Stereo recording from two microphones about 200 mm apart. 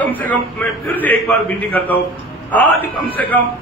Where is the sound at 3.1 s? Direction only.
10° left (ahead or behind).